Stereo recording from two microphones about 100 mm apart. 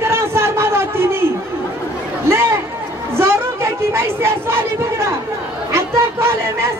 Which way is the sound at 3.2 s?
25° right (ahead or behind).